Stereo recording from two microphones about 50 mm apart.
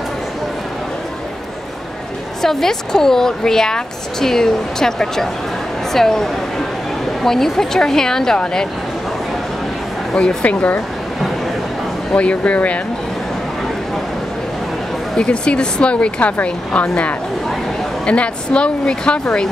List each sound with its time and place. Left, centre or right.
2.4 s a woman's voice: centre
10.1 s speech: left
10.5 s speech: left
12.1 s speech: left
15.1 s speech: centre